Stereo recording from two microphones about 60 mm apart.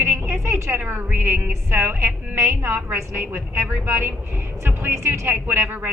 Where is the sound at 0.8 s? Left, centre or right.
Right.